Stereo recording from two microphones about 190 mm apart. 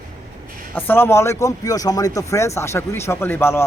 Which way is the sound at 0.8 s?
10° left (ahead or behind).